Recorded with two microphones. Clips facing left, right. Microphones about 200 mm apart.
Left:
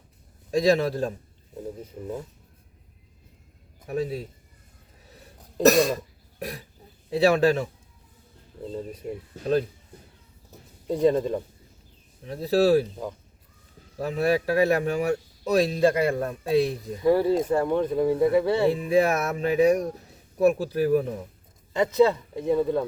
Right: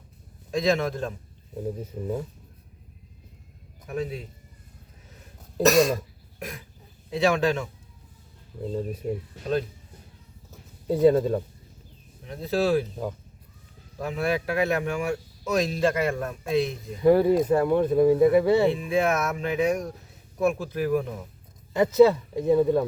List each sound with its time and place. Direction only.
0.5 s speech: 35° left (ahead or behind)
1.8 s speech: 10° right (ahead or behind)
3.8 s speech: 35° left (ahead or behind)
6.4 s speech: 35° left (ahead or behind)
8.6 s speech: 10° right (ahead or behind)
10.8 s speech: 5° right (ahead or behind)
12.2 s speech: 35° left (ahead or behind)
14.0 s speech: 35° left (ahead or behind)
17.0 s speech: 15° right (ahead or behind)
18.7 s speech: 35° left (ahead or behind)
21.9 s speech: 10° right (ahead or behind)